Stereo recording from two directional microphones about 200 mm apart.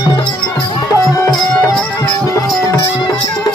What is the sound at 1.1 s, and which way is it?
Music, 15° left (ahead or behind).